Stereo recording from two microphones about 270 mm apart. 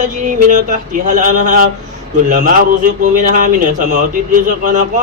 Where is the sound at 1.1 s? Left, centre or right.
Right.